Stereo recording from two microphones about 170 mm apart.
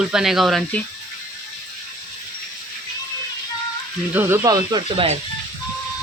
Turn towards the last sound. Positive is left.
turn(degrees=-35)  # may be behind; listen again after turning